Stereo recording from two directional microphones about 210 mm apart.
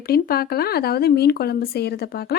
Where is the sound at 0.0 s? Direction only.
45° left (ahead or behind).